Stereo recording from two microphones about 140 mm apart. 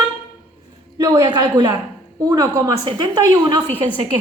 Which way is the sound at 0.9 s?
25° right (ahead or behind).